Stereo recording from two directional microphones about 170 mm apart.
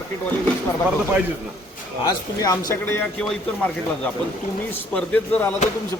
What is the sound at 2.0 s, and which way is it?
Speech, 20° left (ahead or behind).